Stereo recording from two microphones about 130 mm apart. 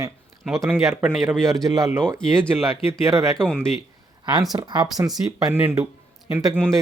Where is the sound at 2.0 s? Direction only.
5° left (ahead or behind).